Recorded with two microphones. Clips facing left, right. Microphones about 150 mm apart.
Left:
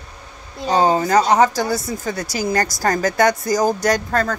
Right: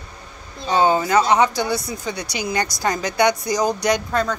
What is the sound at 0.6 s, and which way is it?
Speech, 35° left (ahead or behind).